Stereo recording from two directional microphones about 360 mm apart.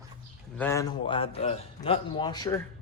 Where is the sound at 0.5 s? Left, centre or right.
Centre.